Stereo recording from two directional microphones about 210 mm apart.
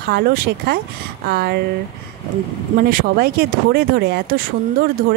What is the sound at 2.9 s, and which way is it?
Speech, 45° right (ahead or behind).